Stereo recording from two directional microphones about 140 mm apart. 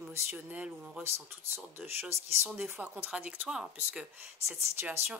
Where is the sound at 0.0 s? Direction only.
15° right (ahead or behind).